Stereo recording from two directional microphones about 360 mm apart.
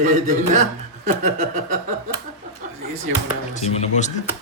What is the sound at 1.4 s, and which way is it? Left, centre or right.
Speech, right.